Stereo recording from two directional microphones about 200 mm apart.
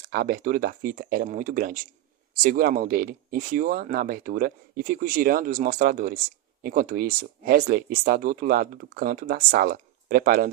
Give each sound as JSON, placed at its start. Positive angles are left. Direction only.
{"t": 0.1, "sound": "speech", "side_deg": -45}